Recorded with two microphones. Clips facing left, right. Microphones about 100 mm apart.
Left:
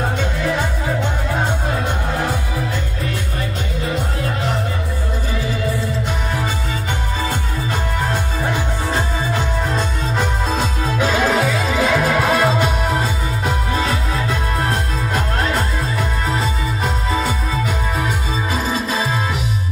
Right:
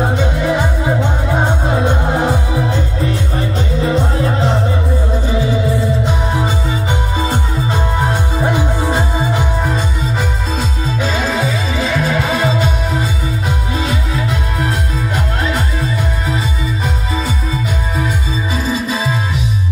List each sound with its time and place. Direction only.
0.2 s music: 20° right (ahead or behind)
3.8 s music: 30° right (ahead or behind)
8.4 s music: 20° right (ahead or behind)
11.0 s music: 10° left (ahead or behind)